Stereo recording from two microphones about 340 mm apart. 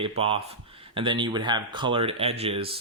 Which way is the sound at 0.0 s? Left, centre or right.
Centre.